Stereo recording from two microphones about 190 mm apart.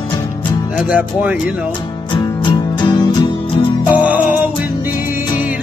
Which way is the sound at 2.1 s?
25° left (ahead or behind).